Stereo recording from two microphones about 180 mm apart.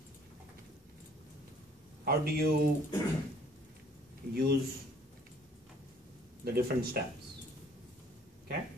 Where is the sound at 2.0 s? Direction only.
60° right (ahead or behind).